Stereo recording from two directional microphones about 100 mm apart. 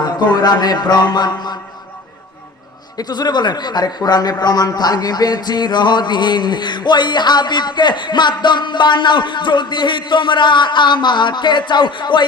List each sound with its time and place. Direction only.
0.0 s a man's voice: 45° left (ahead or behind)
3.0 s a man's voice: 45° left (ahead or behind)